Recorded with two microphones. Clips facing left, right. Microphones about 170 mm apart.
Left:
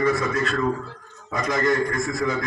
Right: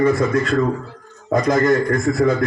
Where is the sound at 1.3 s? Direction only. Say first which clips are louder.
Right 7 dB; 50° right (ahead or behind).